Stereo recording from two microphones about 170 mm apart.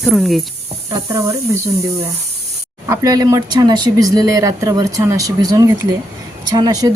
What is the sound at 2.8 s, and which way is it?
A woman's voice, 20° right (ahead or behind).